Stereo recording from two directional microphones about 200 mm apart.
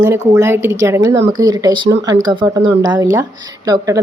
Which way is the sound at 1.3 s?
20° right (ahead or behind).